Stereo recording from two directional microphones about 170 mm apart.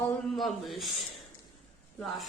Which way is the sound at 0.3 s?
Centre (ahead or behind).